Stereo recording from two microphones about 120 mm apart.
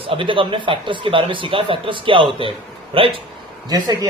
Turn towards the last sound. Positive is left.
turn(degrees=-35)  # may be behind; listen again after turning